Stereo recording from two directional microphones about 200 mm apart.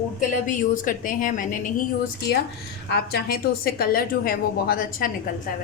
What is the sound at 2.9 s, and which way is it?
A woman's voice, 50° left (ahead or behind).